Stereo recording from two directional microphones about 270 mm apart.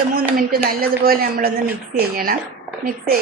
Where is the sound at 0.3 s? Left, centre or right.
Right.